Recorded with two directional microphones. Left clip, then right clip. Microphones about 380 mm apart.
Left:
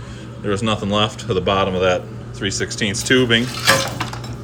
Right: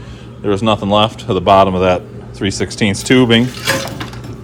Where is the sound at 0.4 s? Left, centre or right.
Centre.